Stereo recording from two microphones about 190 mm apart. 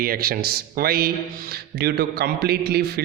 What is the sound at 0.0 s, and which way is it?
A man's voice, 50° right (ahead or behind).